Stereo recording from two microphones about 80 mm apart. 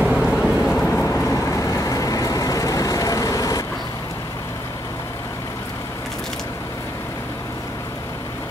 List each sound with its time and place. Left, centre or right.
0.0 s vehicle: centre
0.4 s vehicle: centre
1.0 s vehicle: left